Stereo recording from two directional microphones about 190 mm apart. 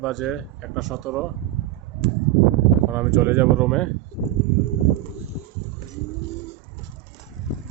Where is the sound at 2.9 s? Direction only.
10° right (ahead or behind).